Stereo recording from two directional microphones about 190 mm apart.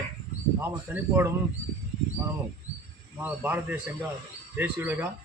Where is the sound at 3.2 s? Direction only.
10° right (ahead or behind).